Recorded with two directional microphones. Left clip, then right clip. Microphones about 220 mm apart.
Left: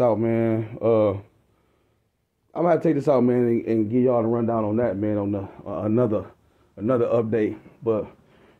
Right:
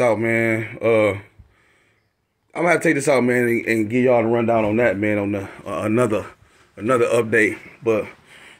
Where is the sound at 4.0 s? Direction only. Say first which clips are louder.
Right 5 dB; 15° right (ahead or behind).